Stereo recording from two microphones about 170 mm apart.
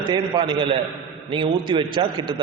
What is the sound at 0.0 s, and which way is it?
A man's voice, 25° right (ahead or behind).